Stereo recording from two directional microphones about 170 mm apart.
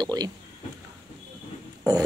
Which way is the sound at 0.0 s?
25° right (ahead or behind).